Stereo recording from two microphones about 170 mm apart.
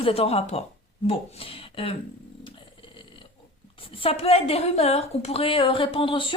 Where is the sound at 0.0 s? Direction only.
35° left (ahead or behind).